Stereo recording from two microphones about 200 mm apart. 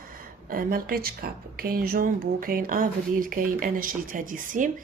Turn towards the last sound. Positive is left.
turn(degrees=-40)  # may be behind; listen again after turning